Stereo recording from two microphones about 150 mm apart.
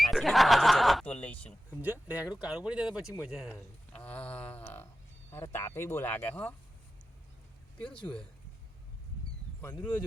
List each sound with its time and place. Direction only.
0.0 s snicker: centre (ahead or behind)
1.0 s speech: 10° left (ahead or behind)
1.8 s speech: 10° right (ahead or behind)
4.0 s speech: 10° left (ahead or behind)
7.9 s speech: 30° left (ahead or behind)
9.6 s speech: 10° left (ahead or behind)